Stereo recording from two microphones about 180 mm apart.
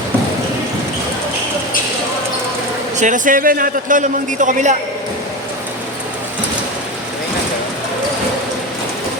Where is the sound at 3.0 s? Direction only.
45° right (ahead or behind).